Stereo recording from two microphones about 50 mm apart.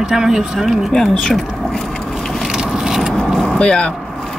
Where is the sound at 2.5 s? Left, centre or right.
Centre.